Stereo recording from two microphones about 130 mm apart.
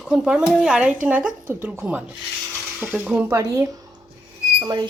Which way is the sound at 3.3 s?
25° right (ahead or behind).